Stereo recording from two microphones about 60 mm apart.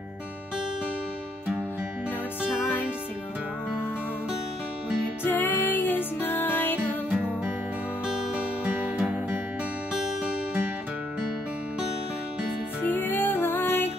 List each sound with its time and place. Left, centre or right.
5.2 s music: left
8.6 s music: right
12.8 s music: left